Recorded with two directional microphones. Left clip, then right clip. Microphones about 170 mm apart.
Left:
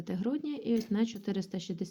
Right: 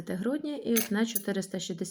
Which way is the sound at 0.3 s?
10° left (ahead or behind).